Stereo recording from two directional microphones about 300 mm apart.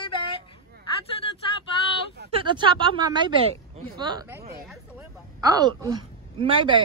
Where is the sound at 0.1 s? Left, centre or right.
Centre.